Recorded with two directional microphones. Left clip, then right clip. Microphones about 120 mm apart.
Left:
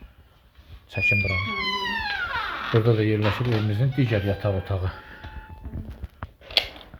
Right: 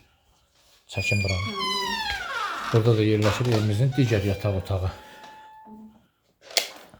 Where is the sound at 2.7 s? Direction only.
15° right (ahead or behind).